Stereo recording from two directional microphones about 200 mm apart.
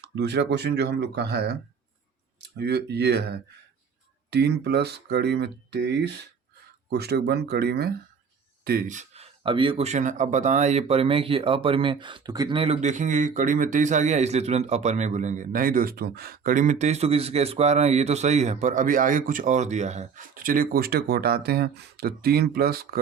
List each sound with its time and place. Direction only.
0.0 s speech: 55° right (ahead or behind)